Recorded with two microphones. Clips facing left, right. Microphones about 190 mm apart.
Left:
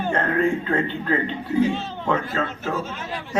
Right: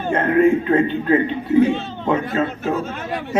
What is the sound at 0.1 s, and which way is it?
A man's voice, 20° right (ahead or behind).